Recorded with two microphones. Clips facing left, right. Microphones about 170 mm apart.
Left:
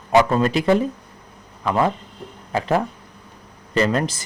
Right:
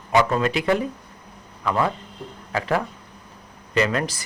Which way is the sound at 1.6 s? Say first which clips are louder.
Left 3 dB; 20° left (ahead or behind).